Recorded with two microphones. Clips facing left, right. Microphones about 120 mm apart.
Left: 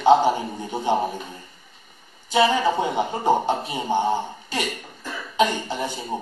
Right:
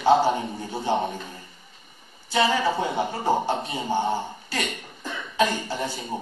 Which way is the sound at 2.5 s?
20° left (ahead or behind).